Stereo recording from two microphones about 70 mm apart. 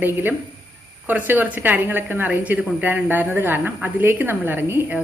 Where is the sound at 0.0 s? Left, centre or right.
Right.